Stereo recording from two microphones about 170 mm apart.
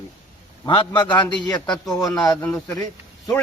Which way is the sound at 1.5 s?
5° left (ahead or behind).